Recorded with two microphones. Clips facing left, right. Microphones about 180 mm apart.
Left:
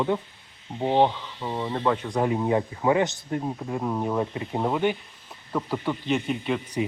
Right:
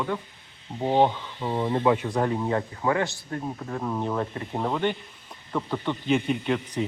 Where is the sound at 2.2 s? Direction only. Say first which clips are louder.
Left 2 dB; 10° left (ahead or behind).